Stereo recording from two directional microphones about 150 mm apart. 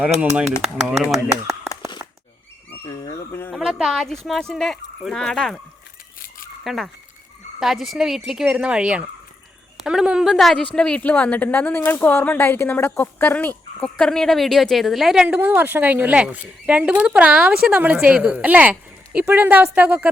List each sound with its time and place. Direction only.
0.6 s speech: centre (ahead or behind)
2.9 s dog: 25° left (ahead or behind)
3.3 s a sound: 15° left (ahead or behind)
3.6 s speech: 5° right (ahead or behind)
6.1 s a sound: 70° left (ahead or behind)
6.7 s speech: centre (ahead or behind)
15.4 s speech: 15° right (ahead or behind)